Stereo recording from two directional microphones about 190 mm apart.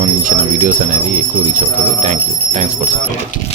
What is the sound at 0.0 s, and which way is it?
Speech, 45° right (ahead or behind).